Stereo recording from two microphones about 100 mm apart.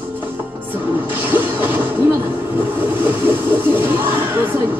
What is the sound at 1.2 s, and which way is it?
Mechanisms, 20° right (ahead or behind).